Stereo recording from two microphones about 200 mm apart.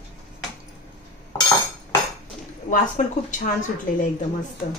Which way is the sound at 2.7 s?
40° left (ahead or behind).